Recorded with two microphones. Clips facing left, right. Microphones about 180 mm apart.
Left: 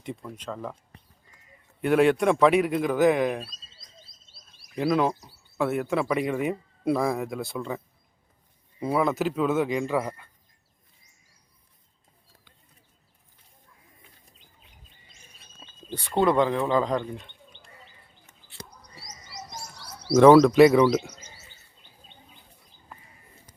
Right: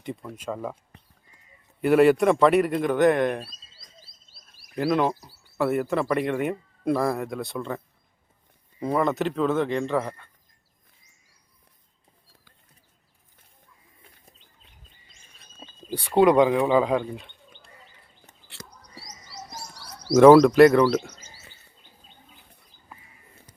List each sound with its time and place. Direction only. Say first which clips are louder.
0.0 s speech: right 2 dB; centre (ahead or behind)
1.8 s speech: right 3 dB; centre (ahead or behind)
3.7 s a sound: even; 20° left (ahead or behind)
4.7 s speech: right 1 dB; centre (ahead or behind)
8.8 s speech: right 1 dB; 5° left (ahead or behind)
15.9 s speech: right 5 dB; 10° right (ahead or behind)
18.5 s whispering: left 1 dB; 90° right
20.1 s speech: right 2 dB; 10° right (ahead or behind)
20.6 s speech: right 1 dB; 10° left (ahead or behind)
21.2 s bird: left 1 dB; 10° right (ahead or behind)